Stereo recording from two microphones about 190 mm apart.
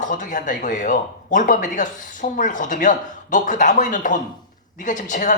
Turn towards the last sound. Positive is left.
turn(degrees=40)  # may be behind; listen again after turning